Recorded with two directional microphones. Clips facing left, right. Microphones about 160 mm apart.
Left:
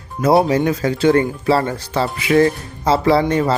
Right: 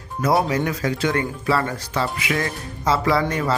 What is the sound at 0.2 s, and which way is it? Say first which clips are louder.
Speech: left 6 dB; 25° left (ahead or behind).